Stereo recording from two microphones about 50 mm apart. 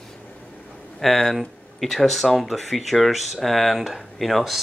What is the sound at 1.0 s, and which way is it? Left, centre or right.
Speech, centre.